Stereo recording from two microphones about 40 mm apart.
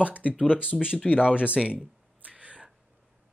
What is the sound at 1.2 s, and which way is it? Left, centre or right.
Speech, left.